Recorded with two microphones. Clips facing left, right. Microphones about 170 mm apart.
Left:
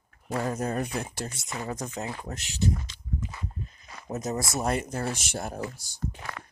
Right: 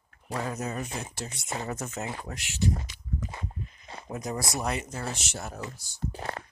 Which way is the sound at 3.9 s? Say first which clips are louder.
Right 3 dB; 25° right (ahead or behind).